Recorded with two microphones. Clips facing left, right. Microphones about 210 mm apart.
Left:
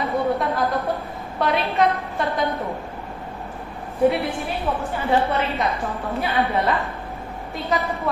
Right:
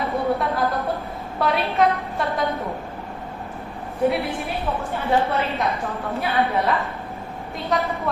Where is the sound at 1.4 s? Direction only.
Centre (ahead or behind).